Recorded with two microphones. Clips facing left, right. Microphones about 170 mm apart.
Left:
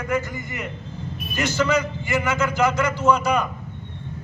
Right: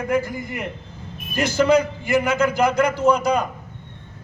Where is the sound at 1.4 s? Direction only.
30° right (ahead or behind).